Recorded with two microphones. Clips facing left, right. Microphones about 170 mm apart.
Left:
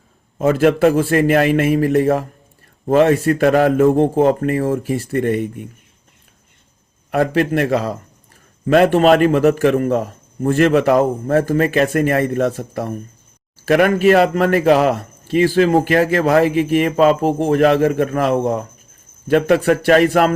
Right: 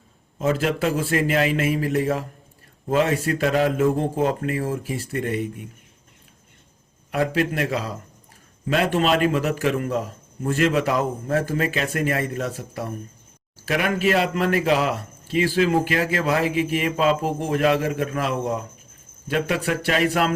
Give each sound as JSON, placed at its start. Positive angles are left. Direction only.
{"t": 0.3, "sound": "a man's voice", "side_deg": 55}
{"t": 7.1, "sound": "a man's voice", "side_deg": 50}